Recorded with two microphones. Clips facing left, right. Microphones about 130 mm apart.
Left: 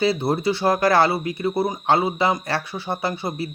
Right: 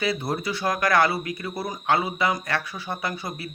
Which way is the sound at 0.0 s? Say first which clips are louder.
Left 6 dB; 30° left (ahead or behind).